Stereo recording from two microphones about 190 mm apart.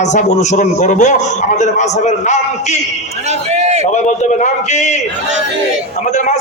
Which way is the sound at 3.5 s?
35° right (ahead or behind).